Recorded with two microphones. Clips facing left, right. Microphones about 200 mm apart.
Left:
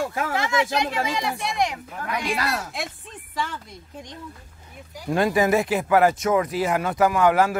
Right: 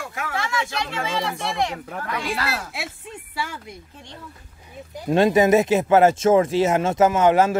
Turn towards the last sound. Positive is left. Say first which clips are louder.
# right 2 dB
turn(degrees=-20)  # may be behind; listen again after turning